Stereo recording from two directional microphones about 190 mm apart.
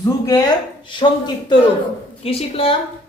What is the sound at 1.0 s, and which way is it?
A woman's voice, 25° left (ahead or behind).